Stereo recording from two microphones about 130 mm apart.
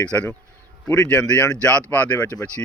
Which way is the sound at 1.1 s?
10° left (ahead or behind).